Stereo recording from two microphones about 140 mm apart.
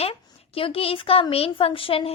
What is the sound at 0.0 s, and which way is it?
A woman's voice, 40° left (ahead or behind).